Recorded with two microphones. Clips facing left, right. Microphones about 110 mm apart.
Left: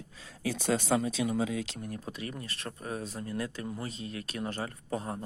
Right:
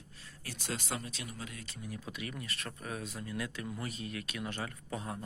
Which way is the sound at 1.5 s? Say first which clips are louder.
Left 13 dB; 90° left.